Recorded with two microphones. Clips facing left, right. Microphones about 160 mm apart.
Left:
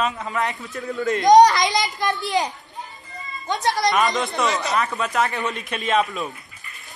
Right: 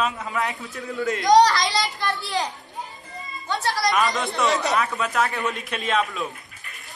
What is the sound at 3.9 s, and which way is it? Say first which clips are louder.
A man's voice: even; centre (ahead or behind).